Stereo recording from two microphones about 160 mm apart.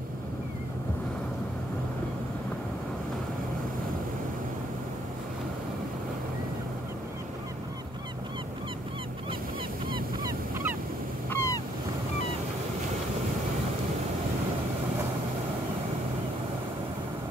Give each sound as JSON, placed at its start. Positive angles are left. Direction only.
{"t": 9.8, "sound": "goose", "side_deg": -30}
{"t": 11.2, "sound": "ocean", "side_deg": 15}